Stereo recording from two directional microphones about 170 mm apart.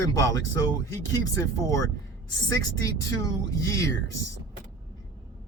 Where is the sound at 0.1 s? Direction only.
20° left (ahead or behind).